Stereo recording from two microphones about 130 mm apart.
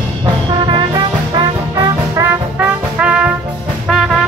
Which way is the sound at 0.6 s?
35° right (ahead or behind).